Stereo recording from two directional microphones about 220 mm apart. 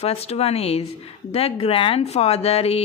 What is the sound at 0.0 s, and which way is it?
A woman's voice, 30° left (ahead or behind).